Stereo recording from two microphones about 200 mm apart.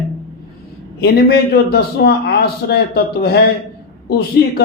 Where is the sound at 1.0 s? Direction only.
55° left (ahead or behind).